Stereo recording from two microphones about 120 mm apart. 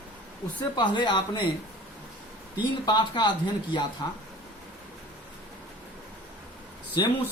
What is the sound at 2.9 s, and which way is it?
Speech, 40° left (ahead or behind).